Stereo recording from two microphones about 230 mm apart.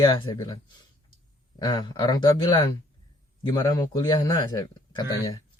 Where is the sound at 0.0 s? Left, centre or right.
Centre.